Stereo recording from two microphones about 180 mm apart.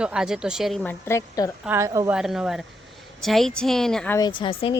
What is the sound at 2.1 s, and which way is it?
Speech, 5° right (ahead or behind).